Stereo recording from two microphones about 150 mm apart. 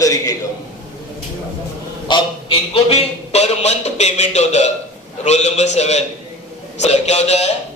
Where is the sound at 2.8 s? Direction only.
45° left (ahead or behind).